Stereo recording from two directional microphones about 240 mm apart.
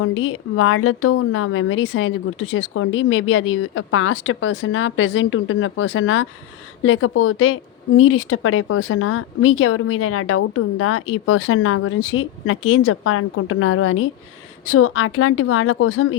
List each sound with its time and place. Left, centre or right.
0.0 s speech: left